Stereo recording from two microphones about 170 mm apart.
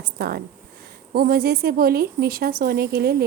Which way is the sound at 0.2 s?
70° right (ahead or behind).